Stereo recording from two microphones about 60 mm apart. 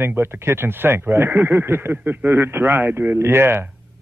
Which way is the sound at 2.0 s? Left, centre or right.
Right.